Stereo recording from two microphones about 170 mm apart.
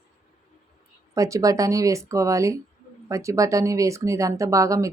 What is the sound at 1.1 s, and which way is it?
Speech, 20° right (ahead or behind).